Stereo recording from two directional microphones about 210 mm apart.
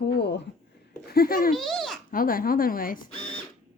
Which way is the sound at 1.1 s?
45° left (ahead or behind).